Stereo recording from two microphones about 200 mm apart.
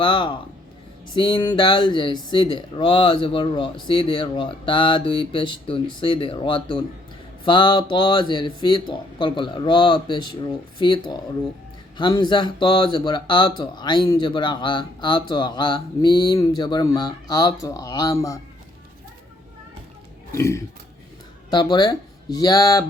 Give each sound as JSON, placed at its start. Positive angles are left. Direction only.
{"t": 0.0, "sound": "speech", "side_deg": 25}
{"t": 20.3, "sound": "speech", "side_deg": 15}